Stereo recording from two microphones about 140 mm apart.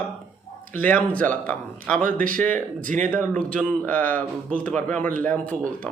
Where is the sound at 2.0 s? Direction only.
75° right (ahead or behind).